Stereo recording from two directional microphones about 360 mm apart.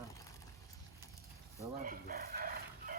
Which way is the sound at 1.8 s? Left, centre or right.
Right.